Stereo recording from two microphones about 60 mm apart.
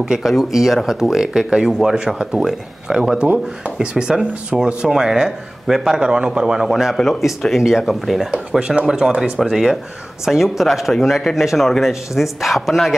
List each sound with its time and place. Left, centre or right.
0.0 s speech: centre
8.3 s speech: centre